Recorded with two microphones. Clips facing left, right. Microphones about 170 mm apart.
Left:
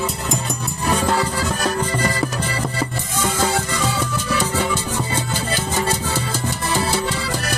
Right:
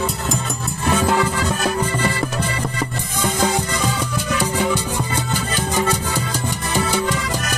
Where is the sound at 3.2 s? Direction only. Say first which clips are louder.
Right 1 dB; 15° right (ahead or behind).